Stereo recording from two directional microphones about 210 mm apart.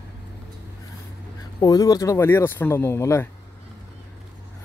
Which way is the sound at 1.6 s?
15° left (ahead or behind).